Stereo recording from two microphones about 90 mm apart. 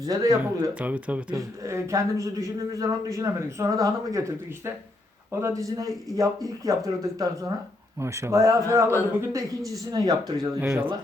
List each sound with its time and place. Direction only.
0.0 s speech: 45° right (ahead or behind)
0.7 s speech: 15° right (ahead or behind)
1.4 s a man's voice: 35° right (ahead or behind)
10.6 s speech: 15° right (ahead or behind)